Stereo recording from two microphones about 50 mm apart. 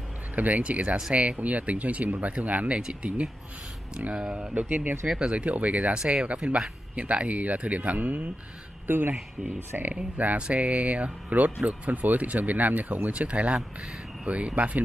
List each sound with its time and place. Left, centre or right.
0.4 s speech: right
4.6 s speech: right
5.2 s speech: right
8.8 s speech: right
9.9 s speech: right